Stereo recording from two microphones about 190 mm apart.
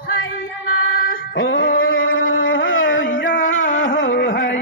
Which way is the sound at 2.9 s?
80° left.